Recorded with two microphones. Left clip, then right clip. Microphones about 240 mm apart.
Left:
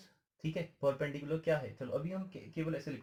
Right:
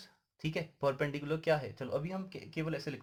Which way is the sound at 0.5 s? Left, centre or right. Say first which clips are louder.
Even; right.